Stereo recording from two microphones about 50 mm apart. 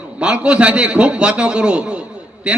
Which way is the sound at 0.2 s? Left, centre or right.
Centre.